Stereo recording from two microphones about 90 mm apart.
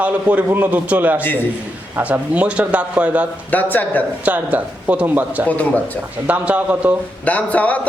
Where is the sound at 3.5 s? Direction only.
20° left (ahead or behind).